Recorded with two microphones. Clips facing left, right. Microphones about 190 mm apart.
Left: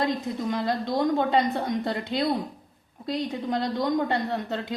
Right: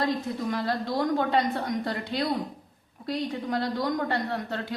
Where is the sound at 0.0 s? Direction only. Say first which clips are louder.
Left 1 dB; 20° left (ahead or behind).